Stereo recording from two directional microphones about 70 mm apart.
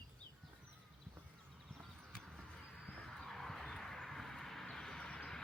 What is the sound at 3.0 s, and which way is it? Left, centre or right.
Vehicle, centre.